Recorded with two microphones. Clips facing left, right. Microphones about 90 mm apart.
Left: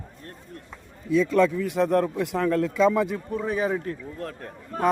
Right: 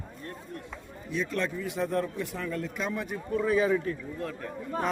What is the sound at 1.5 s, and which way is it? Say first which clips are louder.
Speech: left 7 dB; 65° left (ahead or behind).